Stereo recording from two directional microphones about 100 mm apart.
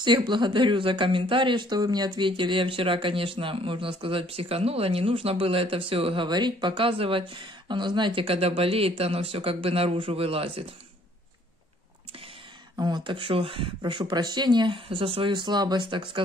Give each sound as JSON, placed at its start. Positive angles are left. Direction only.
{"t": 0.0, "sound": "a woman's voice", "side_deg": -50}
{"t": 6.2, "sound": "a woman's voice", "side_deg": -50}
{"t": 12.7, "sound": "speech", "side_deg": -45}